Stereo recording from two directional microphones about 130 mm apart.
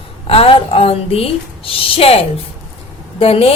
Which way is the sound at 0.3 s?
50° left (ahead or behind).